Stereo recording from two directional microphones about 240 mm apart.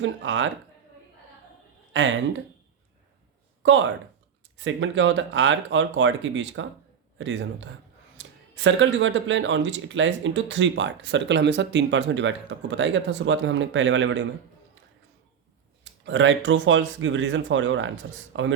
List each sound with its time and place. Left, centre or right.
0.0 s speech: right
1.9 s speech: right
3.6 s speech: right
15.8 s speech: right